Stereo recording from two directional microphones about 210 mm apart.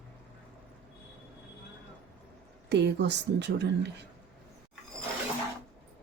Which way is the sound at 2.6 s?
55° right (ahead or behind).